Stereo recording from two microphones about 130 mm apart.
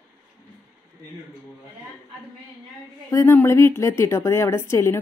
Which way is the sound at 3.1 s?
20° left (ahead or behind).